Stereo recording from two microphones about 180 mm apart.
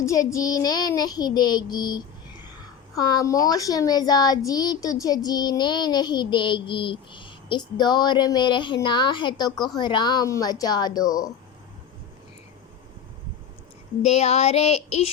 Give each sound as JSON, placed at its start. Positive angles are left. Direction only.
{"t": 0.0, "sound": "a child's voice", "side_deg": 15}
{"t": 14.0, "sound": "child singing", "side_deg": 35}